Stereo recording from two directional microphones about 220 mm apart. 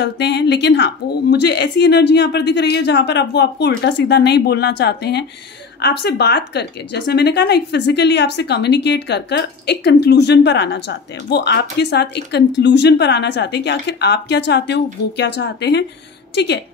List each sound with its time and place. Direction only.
0.0 s speech: 50° left (ahead or behind)